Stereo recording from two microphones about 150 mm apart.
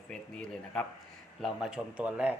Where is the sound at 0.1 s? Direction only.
5° left (ahead or behind).